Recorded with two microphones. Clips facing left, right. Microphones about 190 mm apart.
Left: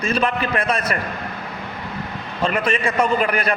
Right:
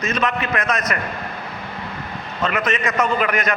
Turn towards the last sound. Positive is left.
turn(degrees=30)  # may be behind; listen again after turning